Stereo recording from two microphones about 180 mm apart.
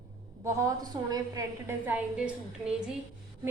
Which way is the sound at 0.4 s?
20° right (ahead or behind).